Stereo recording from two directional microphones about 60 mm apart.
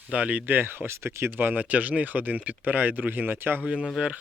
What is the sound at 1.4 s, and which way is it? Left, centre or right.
Speech, right.